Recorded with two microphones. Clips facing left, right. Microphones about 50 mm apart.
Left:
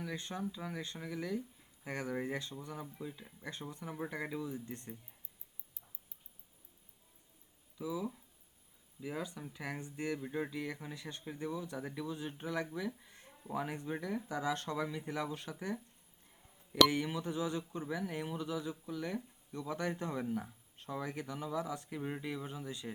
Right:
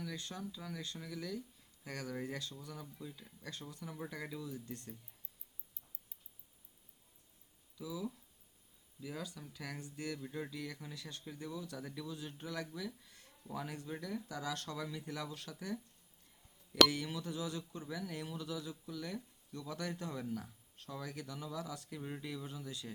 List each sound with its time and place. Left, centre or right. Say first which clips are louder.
0.0 s speech: left 4 dB; left
7.8 s speech: left 4 dB; left